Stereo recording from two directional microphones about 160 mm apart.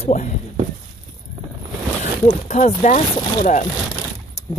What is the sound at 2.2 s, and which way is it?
Speech, 45° left (ahead or behind).